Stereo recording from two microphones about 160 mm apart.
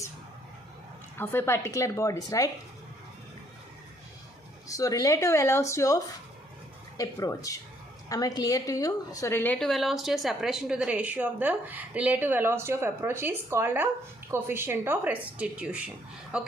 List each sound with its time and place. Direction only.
1.1 s a woman's voice: 15° left (ahead or behind)
4.7 s a woman's voice: 20° left (ahead or behind); by 16.5 s 5° right (ahead or behind)